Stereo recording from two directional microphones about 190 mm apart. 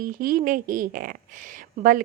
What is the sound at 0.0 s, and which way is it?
A woman's voice, 45° right (ahead or behind).